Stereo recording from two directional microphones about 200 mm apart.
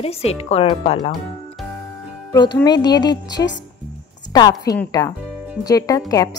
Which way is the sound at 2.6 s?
20° left (ahead or behind).